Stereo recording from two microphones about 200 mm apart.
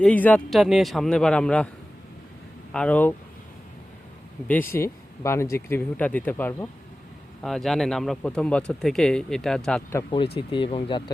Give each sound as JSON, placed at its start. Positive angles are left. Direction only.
{"t": 0.0, "sound": "speech", "side_deg": 10}
{"t": 2.7, "sound": "speech", "side_deg": 5}
{"t": 4.4, "sound": "speech", "side_deg": 10}
{"t": 10.3, "sound": "speech", "side_deg": 25}